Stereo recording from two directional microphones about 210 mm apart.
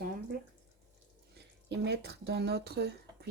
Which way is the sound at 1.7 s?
55° right (ahead or behind).